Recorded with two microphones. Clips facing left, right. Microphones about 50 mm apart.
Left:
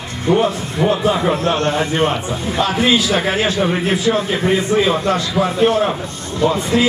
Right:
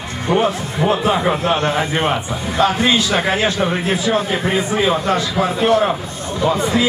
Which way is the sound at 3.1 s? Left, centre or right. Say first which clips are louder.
Even; right.